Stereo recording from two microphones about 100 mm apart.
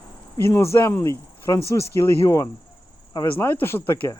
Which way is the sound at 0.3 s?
25° left (ahead or behind).